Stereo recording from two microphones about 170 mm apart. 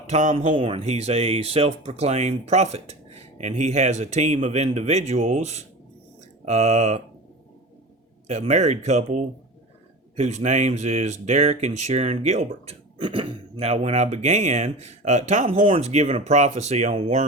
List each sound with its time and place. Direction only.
0.1 s speech: 45° right (ahead or behind)
0.5 s speech: 35° right (ahead or behind)
8.3 s speech: 40° right (ahead or behind)